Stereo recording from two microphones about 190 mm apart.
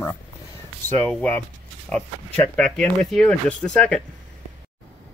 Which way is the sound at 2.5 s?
5° left (ahead or behind).